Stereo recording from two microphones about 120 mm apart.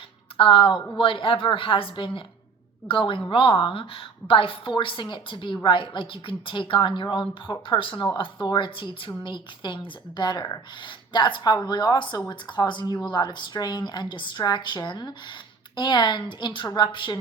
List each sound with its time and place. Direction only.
0.3 s a woman's voice: 45° left (ahead or behind)